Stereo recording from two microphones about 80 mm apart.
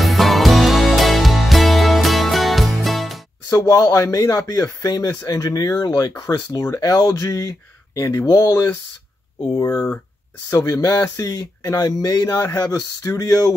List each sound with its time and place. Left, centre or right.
0.0 s music: centre
3.4 s speech: left
10.5 s speech: left
12.3 s speech: left
12.5 s speech: left